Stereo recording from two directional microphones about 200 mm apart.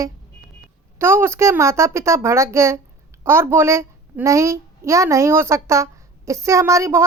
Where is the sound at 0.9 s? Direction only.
10° right (ahead or behind).